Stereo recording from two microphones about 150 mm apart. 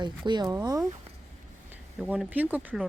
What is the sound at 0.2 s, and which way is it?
Speech, 30° right (ahead or behind).